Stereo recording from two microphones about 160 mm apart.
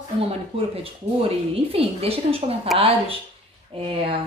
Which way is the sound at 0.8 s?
35° right (ahead or behind).